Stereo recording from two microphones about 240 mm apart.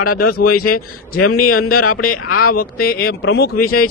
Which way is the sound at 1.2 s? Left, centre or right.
Left.